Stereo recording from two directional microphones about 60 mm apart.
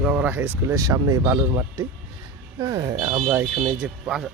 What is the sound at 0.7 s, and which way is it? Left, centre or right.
Speech, right.